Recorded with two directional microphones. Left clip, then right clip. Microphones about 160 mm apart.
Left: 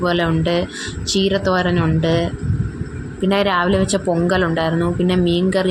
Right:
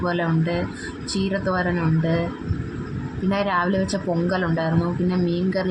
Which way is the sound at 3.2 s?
50° left (ahead or behind).